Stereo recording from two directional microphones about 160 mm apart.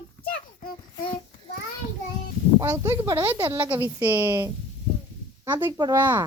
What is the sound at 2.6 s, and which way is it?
Speech, 20° right (ahead or behind).